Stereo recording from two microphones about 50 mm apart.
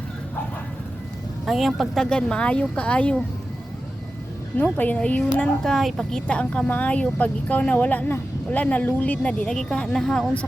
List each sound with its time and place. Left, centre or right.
1.5 s speech: centre
2.0 s speech: centre
4.5 s speech: left
5.6 s speech: centre
6.2 s speech: left